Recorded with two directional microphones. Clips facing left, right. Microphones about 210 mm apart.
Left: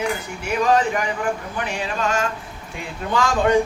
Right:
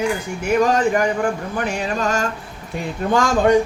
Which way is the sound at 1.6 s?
40° right (ahead or behind).